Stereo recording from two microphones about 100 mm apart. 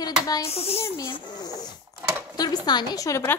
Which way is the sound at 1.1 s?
45° left (ahead or behind).